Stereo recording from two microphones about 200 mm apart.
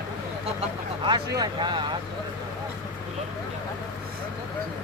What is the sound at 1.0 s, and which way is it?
Speech, 25° right (ahead or behind).